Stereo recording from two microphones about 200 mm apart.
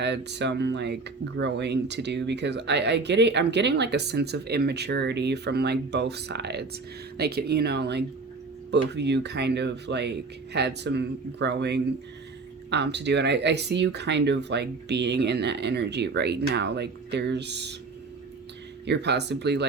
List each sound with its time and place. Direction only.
0.0 s speech: 60° right (ahead or behind)
18.9 s speech: 55° right (ahead or behind)